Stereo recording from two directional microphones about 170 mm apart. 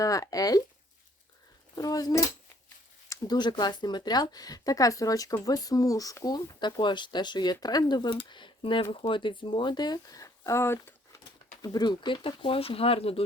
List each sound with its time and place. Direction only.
0.0 s speech: 20° left (ahead or behind)
1.7 s speech: 20° left (ahead or behind)